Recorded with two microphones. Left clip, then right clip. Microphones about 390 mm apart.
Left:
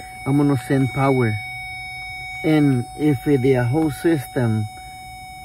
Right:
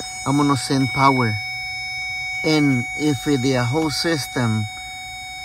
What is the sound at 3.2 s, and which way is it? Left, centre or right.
Speech, centre.